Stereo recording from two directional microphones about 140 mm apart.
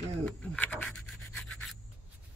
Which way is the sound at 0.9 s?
Centre (ahead or behind).